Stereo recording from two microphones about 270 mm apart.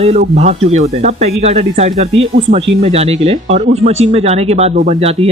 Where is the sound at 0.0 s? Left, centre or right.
Right.